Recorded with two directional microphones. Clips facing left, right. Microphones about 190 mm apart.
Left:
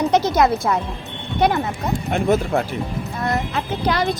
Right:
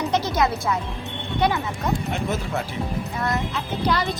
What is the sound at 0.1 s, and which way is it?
Speech, 45° left (ahead or behind).